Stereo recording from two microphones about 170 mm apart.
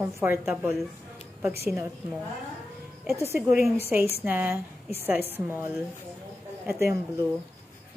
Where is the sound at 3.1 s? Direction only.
15° right (ahead or behind).